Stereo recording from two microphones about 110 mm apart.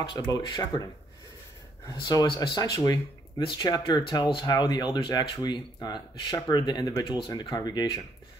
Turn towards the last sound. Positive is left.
turn(degrees=40)  # may be behind; listen again after turning